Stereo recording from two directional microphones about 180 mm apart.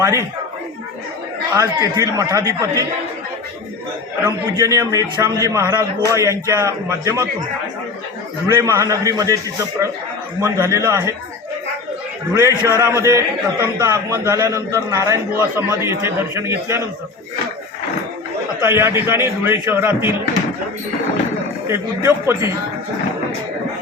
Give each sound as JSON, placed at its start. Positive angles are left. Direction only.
{"t": 0.0, "sound": "a man's voice", "side_deg": -15}
{"t": 1.5, "sound": "a man's voice", "side_deg": -20}
{"t": 4.5, "sound": "a man's voice", "side_deg": -20}
{"t": 8.4, "sound": "a man's voice", "side_deg": -15}
{"t": 12.3, "sound": "a man's voice", "side_deg": -15}
{"t": 18.6, "sound": "a man's voice", "side_deg": -15}
{"t": 21.7, "sound": "a man's voice", "side_deg": -15}